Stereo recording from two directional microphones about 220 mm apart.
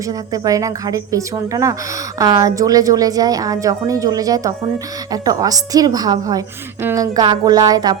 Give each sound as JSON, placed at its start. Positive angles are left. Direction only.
{"t": 0.1, "sound": "a woman's voice", "side_deg": -15}